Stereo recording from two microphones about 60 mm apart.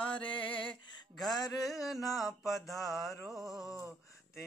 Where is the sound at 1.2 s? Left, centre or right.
Centre.